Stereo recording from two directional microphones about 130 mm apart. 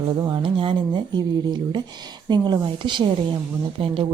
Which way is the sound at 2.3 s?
35° right (ahead or behind).